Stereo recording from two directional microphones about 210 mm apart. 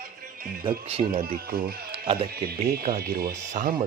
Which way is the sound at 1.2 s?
40° right (ahead or behind).